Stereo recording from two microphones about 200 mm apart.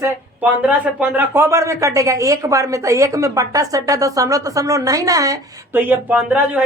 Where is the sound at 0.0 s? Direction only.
5° right (ahead or behind).